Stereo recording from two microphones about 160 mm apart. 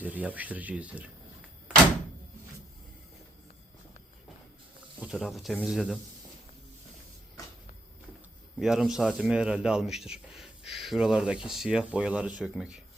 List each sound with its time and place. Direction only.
0.0 s speech: 10° right (ahead or behind)
4.9 s speech: centre (ahead or behind)
8.5 s speech: 5° right (ahead or behind)